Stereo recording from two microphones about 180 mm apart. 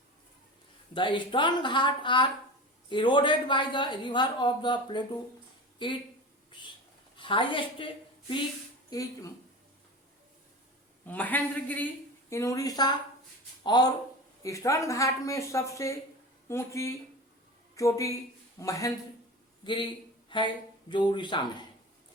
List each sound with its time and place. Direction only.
0.9 s speech: 25° left (ahead or behind)
7.2 s speech: 25° left (ahead or behind)
8.9 s speech: 20° left (ahead or behind)
11.0 s a woman's voice: 10° left (ahead or behind); by 21.7 s 25° left (ahead or behind)